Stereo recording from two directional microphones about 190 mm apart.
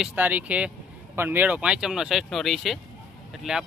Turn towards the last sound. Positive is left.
turn(degrees=0)  # may be behind; listen again after turning